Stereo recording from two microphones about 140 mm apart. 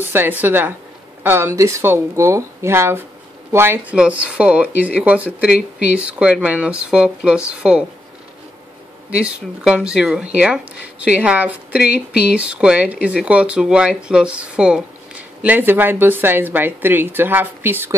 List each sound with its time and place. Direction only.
0.0 s a woman's voice: 15° right (ahead or behind)
9.1 s a woman's voice: 10° right (ahead or behind)